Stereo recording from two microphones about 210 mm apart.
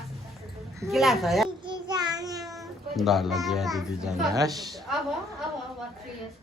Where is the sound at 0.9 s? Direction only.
Centre (ahead or behind).